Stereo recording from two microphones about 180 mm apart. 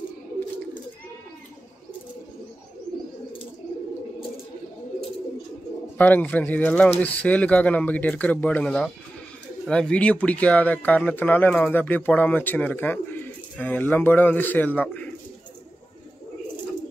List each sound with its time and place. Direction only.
5.9 s speech: 10° left (ahead or behind)